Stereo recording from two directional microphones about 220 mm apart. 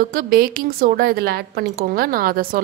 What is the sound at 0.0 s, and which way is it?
Speech, 40° right (ahead or behind).